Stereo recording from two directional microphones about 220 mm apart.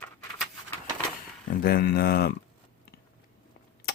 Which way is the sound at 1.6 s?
45° left (ahead or behind).